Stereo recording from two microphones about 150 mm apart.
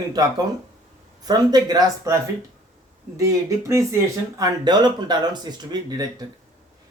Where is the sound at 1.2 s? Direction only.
25° right (ahead or behind).